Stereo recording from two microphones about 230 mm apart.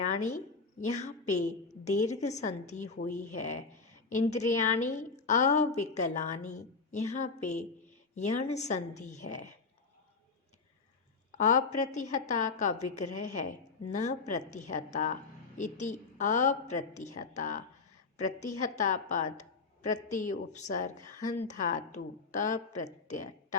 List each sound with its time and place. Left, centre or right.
0.0 s a woman's voice: left
11.3 s a woman's voice: left
18.6 s a woman's voice: left